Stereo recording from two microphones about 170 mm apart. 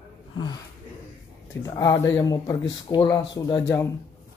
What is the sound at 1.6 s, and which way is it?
Speech, 20° left (ahead or behind).